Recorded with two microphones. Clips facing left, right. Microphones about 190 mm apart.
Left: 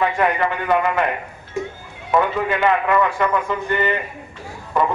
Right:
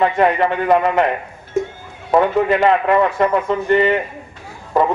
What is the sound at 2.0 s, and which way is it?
Speech, 35° right (ahead or behind).